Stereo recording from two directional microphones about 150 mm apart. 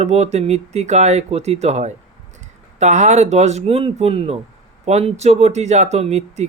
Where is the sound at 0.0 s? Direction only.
45° right (ahead or behind).